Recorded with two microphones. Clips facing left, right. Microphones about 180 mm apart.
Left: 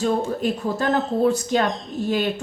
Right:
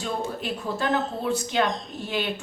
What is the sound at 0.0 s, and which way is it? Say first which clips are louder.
A woman's voice: left 8 dB; 40° left (ahead or behind).